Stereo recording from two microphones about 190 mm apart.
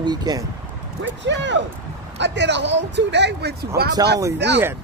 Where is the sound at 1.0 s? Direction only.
70° right (ahead or behind).